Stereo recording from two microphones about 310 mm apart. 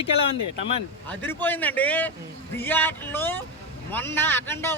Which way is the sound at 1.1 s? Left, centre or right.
Centre.